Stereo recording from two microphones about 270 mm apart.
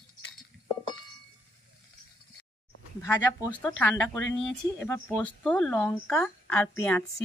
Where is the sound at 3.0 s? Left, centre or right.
Centre.